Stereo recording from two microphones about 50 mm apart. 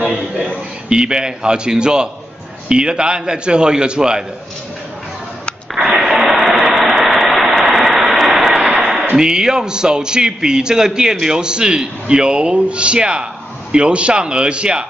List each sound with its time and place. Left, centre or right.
0.8 s a man's voice: centre
5.8 s engine: centre
7.7 s vehicle: centre
8.6 s a sound: centre
9.1 s a man's voice: centre